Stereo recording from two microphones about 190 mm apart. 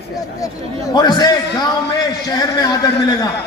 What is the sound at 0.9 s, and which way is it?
Speech, 20° left (ahead or behind).